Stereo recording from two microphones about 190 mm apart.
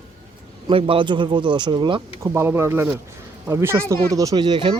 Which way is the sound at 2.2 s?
10° right (ahead or behind).